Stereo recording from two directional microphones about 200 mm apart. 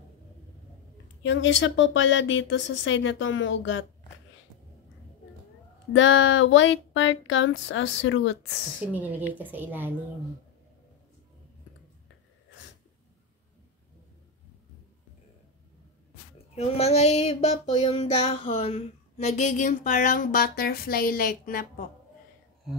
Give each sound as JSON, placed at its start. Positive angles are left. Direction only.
{"t": 1.2, "sound": "speech", "side_deg": 70}
{"t": 5.9, "sound": "speech", "side_deg": 70}
{"t": 8.9, "sound": "a woman's voice", "side_deg": -10}
{"t": 16.5, "sound": "a sound", "side_deg": 30}